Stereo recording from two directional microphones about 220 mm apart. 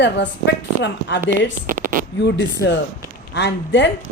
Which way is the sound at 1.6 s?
40° right (ahead or behind).